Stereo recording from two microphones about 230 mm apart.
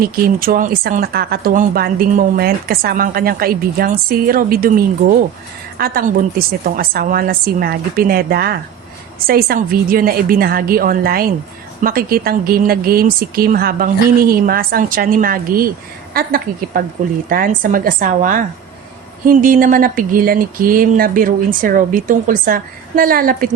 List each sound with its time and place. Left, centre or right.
0.0 s speech: right